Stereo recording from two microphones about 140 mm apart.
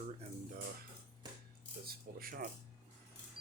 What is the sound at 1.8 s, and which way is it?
Speech, 90° right.